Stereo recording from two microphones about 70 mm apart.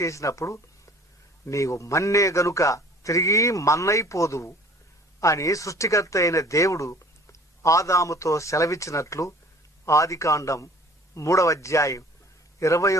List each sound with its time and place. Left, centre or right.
0.0 s a man's voice: left